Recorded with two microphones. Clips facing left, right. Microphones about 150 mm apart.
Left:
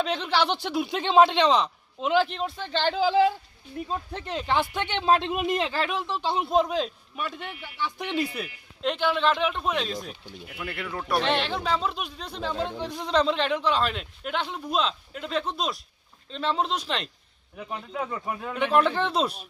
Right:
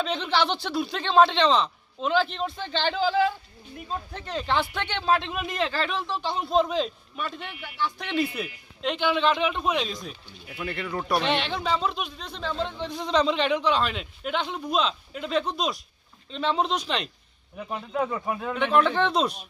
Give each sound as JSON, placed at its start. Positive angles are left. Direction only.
{"t": 0.0, "sound": "speech", "side_deg": 5}
{"t": 3.8, "sound": "speech", "side_deg": 25}
{"t": 4.4, "sound": "speech", "side_deg": 15}
{"t": 8.4, "sound": "a man's voice", "side_deg": 0}